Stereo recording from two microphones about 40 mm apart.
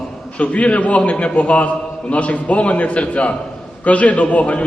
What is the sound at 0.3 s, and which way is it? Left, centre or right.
A man's voice, left.